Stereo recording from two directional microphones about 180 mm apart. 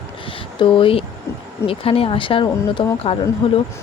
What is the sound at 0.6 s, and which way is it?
Speech, 30° left (ahead or behind).